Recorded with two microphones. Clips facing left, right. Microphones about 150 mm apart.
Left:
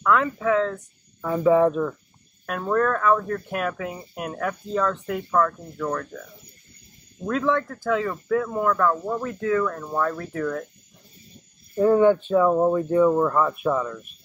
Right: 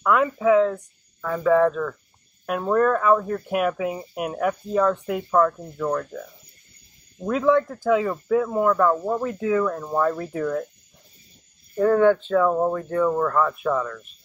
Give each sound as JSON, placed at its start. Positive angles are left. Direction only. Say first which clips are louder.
{"t": 0.0, "sound": "speech", "louder": "right 2 dB", "side_deg": -10}
{"t": 1.2, "sound": "speech", "louder": "left 1 dB", "side_deg": 15}
{"t": 2.4, "sound": "speech", "louder": "right 3 dB", "side_deg": -10}
{"t": 7.2, "sound": "speech", "louder": "right 4 dB", "side_deg": -10}
{"t": 11.7, "sound": "speech", "louder": "even", "side_deg": 15}